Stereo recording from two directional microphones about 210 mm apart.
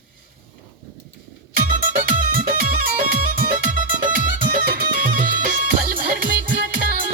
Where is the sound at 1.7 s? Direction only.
40° right (ahead or behind).